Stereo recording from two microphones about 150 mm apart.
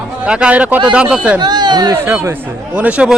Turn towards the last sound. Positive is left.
turn(degrees=-10)  # may be behind; listen again after turning